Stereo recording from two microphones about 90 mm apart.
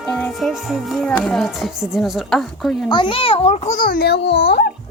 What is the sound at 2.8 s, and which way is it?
Speech, 65° left (ahead or behind).